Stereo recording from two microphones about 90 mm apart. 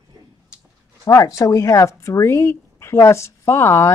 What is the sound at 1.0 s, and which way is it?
Speech, 40° left (ahead or behind).